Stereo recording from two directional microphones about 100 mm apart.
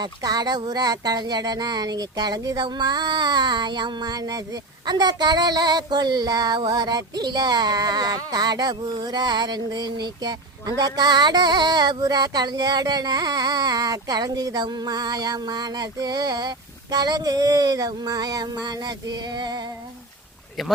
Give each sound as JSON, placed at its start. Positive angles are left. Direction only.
{"t": 0.0, "sound": "speech", "side_deg": -40}
{"t": 2.6, "sound": "a sound", "side_deg": -45}
{"t": 20.6, "sound": "speech", "side_deg": 0}